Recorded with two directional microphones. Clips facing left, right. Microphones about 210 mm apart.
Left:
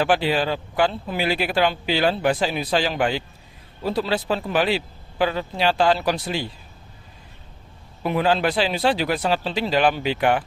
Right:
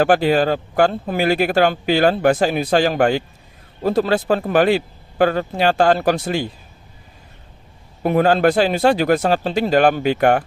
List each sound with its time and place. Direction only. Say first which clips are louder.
0.0 s speech: right 6 dB; 45° right (ahead or behind)
8.0 s speech: right 6 dB; 45° right (ahead or behind)